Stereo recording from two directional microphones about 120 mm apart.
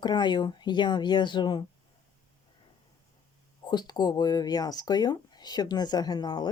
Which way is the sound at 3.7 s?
35° left (ahead or behind).